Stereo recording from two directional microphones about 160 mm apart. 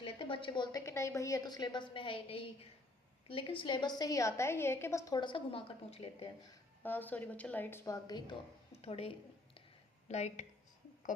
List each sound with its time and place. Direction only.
0.0 s a woman's voice: 35° left (ahead or behind)
6.8 s a woman's voice: 10° left (ahead or behind)
8.7 s a sound: 40° left (ahead or behind)
10.1 s speech: 45° left (ahead or behind)